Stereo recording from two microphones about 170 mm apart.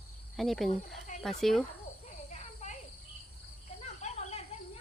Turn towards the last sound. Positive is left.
turn(degrees=40)  # may be behind; listen again after turning